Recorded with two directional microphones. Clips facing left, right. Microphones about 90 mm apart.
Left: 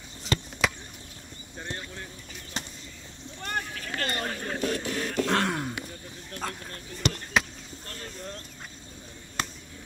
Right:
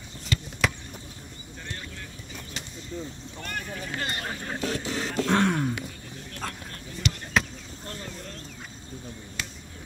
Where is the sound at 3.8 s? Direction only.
15° right (ahead or behind).